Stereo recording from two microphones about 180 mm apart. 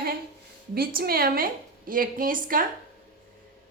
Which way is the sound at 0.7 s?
55° right (ahead or behind).